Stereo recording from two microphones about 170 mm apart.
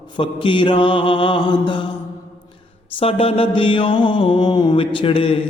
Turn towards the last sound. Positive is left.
turn(degrees=30)  # may be behind; listen again after turning